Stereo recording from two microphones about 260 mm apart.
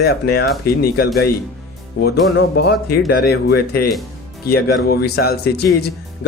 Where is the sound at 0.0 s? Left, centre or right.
Left.